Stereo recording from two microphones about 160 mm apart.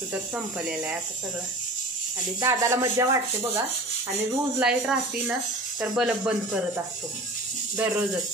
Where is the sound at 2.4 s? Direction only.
20° right (ahead or behind).